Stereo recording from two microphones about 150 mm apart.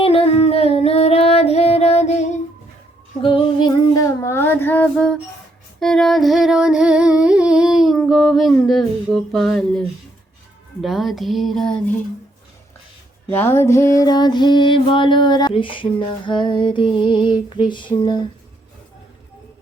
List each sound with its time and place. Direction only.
0.0 s singing: 40° left (ahead or behind)
3.2 s female singing: 35° left (ahead or behind)
3.7 s child singing: 20° left (ahead or behind)
5.8 s humming: centre (ahead or behind)
10.8 s speech: centre (ahead or behind)
13.3 s music: 15° left (ahead or behind); by 18.3 s 30° left (ahead or behind)